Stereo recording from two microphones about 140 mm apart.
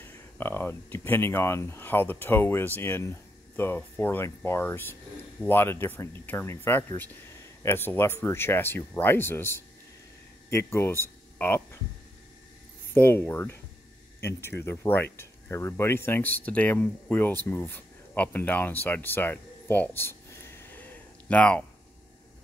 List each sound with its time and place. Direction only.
0.0 s speech: 15° left (ahead or behind)
12.9 s speech: 15° left (ahead or behind)
17.5 s a sound: 15° left (ahead or behind)